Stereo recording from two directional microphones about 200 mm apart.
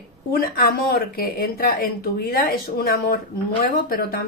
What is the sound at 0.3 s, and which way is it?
Speech, 50° left (ahead or behind).